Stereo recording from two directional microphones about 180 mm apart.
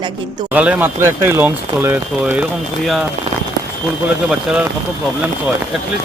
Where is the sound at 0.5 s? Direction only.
5° right (ahead or behind).